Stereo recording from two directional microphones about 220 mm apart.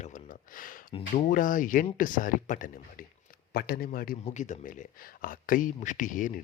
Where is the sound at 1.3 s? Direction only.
40° left (ahead or behind).